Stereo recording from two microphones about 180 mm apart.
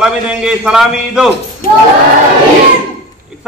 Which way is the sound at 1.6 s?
50° left (ahead or behind).